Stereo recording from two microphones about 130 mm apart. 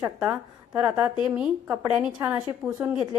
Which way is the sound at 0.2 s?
10° right (ahead or behind).